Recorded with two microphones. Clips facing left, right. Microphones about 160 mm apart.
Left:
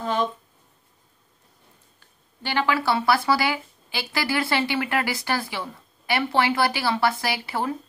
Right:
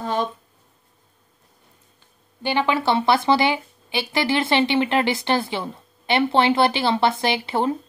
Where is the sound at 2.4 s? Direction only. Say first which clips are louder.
Right 3 dB; 20° right (ahead or behind).